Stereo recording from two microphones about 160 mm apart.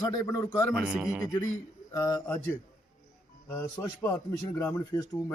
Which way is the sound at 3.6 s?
25° left (ahead or behind).